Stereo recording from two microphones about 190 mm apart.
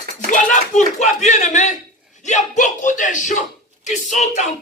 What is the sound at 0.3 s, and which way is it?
Speech, 40° left (ahead or behind).